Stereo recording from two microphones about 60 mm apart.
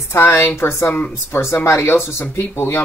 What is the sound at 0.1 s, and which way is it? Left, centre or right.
Speech, left.